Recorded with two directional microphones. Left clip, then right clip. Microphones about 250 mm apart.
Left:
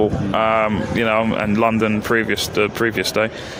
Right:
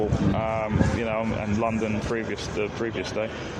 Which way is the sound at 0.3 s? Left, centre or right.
Left.